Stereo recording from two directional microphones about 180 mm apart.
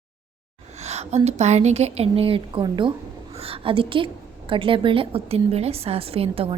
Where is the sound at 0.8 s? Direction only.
35° right (ahead or behind).